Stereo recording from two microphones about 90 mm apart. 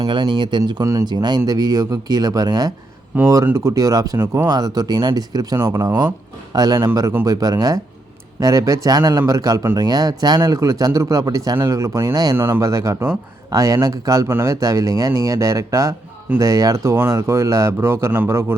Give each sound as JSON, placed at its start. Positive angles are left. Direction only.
{"t": 0.0, "sound": "speech", "side_deg": -55}
{"t": 0.6, "sound": "speech", "side_deg": -45}
{"t": 1.0, "sound": "speech", "side_deg": -55}
{"t": 3.2, "sound": "speech", "side_deg": -25}
{"t": 12.4, "sound": "speech", "side_deg": -30}